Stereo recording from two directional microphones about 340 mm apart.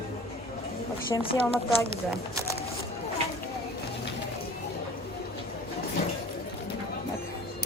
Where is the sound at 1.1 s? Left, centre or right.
Centre.